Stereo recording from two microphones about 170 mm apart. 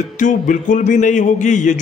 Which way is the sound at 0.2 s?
50° left (ahead or behind).